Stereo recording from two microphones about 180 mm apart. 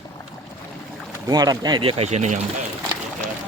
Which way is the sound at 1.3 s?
20° right (ahead or behind).